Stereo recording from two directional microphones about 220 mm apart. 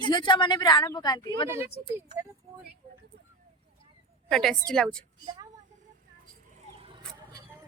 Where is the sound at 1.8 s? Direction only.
25° right (ahead or behind).